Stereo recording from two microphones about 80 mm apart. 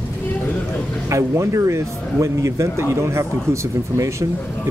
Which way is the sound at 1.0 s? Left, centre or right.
Right.